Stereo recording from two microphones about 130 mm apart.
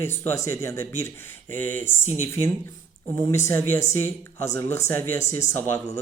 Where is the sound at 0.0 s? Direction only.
20° left (ahead or behind).